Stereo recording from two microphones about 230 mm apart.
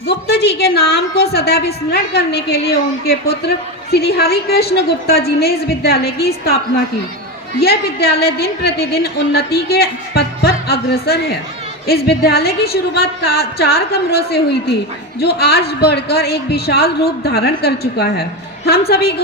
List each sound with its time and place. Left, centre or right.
0.1 s a man's voice: left
7.6 s a man's voice: left